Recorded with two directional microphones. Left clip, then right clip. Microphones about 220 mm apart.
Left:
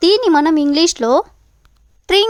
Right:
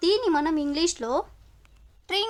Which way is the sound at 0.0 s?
35° left (ahead or behind).